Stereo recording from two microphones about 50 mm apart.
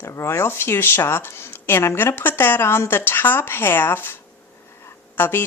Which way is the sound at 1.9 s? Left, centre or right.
Left.